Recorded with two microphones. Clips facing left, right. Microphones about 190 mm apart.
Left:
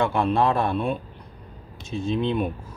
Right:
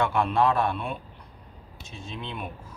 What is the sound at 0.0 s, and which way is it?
Speech, 30° left (ahead or behind).